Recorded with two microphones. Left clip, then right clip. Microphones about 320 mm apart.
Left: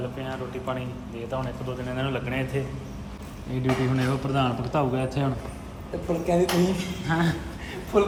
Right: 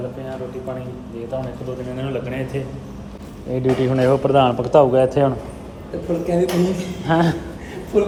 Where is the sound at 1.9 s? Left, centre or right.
Centre.